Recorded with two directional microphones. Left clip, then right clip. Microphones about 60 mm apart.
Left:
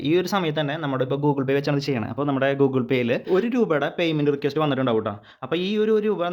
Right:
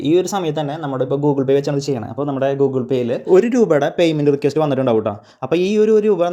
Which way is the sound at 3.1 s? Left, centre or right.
Left.